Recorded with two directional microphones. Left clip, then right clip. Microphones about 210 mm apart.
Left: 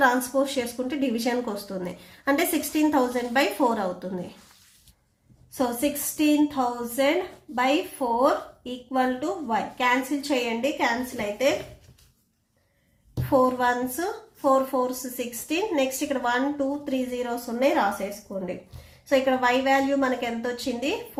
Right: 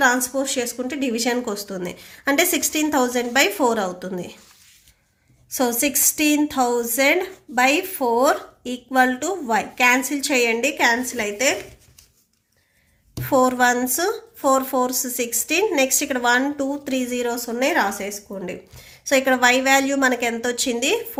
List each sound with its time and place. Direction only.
0.0 s speech: 20° right (ahead or behind)
5.5 s a woman's voice: 45° right (ahead or behind)
13.3 s speech: 40° right (ahead or behind)